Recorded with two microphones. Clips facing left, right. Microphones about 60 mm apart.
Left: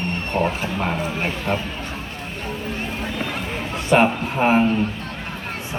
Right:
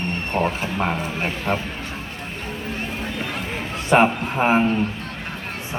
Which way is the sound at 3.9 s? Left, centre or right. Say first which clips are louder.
Even; centre.